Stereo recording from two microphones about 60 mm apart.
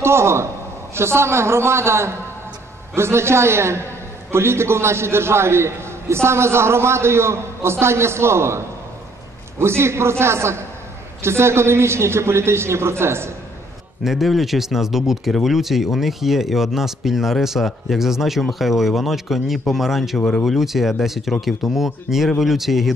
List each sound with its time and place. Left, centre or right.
0.0 s a man's voice: right
14.0 s speech: centre
20.2 s speech: centre
20.4 s speech: centre